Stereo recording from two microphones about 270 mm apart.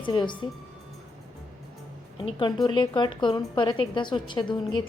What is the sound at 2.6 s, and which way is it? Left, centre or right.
Speech, centre.